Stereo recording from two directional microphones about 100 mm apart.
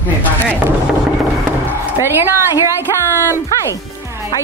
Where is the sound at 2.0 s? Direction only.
25° right (ahead or behind).